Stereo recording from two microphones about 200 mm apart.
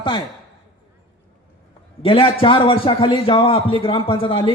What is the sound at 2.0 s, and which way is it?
A man's voice, 25° left (ahead or behind).